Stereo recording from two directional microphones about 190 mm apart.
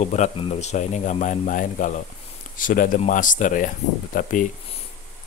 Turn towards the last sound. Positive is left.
turn(degrees=45)  # may be behind; listen again after turning